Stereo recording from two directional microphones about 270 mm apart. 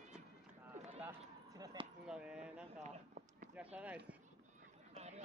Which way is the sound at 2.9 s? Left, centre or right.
Right.